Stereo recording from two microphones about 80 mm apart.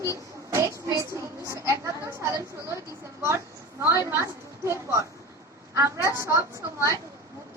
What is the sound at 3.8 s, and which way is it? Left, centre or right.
Speech, right.